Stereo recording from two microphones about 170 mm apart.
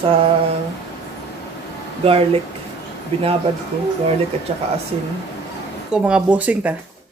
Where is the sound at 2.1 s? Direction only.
35° right (ahead or behind).